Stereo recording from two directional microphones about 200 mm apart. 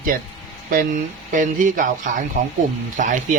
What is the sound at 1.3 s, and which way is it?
Speech, 40° right (ahead or behind).